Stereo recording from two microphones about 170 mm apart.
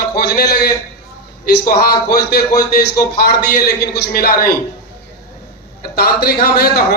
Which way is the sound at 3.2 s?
55° left (ahead or behind).